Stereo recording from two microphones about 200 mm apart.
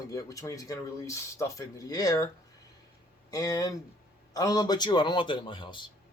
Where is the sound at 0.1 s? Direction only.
15° left (ahead or behind).